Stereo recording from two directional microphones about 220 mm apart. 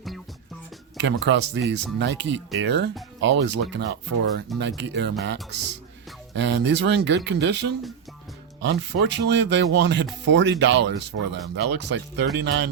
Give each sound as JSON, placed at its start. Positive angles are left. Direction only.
{"t": 1.0, "sound": "speech", "side_deg": -55}
{"t": 8.6, "sound": "speech", "side_deg": -50}